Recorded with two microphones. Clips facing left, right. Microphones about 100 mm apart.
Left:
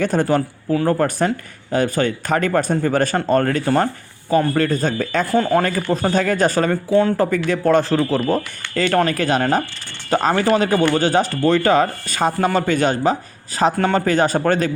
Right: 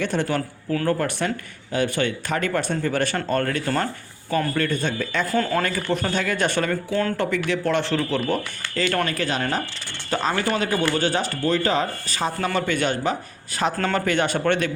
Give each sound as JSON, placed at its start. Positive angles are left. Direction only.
{"t": 0.0, "sound": "speech", "side_deg": 45}
{"t": 5.3, "sound": "speech", "side_deg": 20}
{"t": 5.6, "sound": "speech", "side_deg": 35}